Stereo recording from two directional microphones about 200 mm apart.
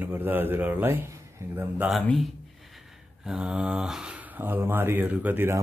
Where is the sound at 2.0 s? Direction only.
Centre (ahead or behind).